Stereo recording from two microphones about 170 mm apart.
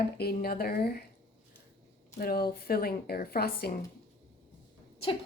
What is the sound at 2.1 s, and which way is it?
Speech, 60° left (ahead or behind).